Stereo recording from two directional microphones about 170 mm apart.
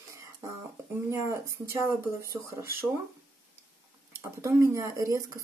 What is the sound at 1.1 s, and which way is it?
Speech, 15° right (ahead or behind).